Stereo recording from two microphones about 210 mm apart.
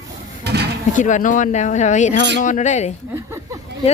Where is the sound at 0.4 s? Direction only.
50° right (ahead or behind).